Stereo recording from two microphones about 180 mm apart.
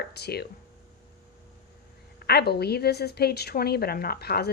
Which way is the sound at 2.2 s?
65° left (ahead or behind).